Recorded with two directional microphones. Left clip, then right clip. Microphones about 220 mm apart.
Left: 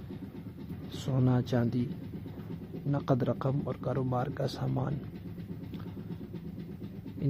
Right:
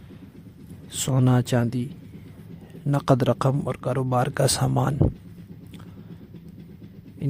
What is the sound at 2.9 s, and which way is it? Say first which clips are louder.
Speech: right 10 dB; 50° right (ahead or behind).